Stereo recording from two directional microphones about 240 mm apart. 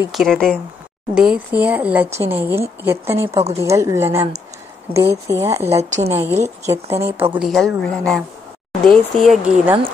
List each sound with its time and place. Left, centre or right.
0.0 s a woman's voice: centre
5.8 s a woman's voice: right
6.6 s a woman's voice: centre